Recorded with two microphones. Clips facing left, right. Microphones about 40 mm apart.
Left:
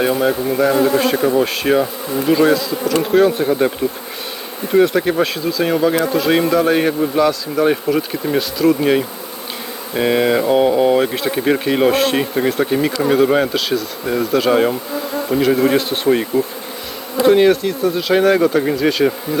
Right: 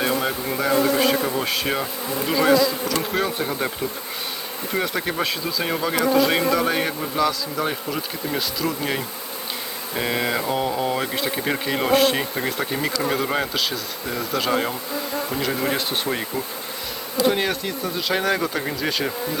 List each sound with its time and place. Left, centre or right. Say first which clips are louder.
0.0 s speech: left 7 dB; centre
4.7 s speech: left 11 dB; centre
7.5 s speech: left 10 dB; centre
8.4 s speech: left 11 dB; centre
8.8 s speech: left 10 dB; centre
10.6 s speech: left 10 dB; left
11.1 s speech: left 7 dB; centre